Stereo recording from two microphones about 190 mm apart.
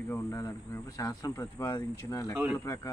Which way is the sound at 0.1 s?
20° left (ahead or behind).